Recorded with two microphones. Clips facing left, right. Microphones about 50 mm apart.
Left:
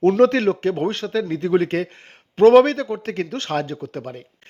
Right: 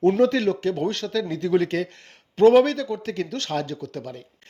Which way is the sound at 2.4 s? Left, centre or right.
Left.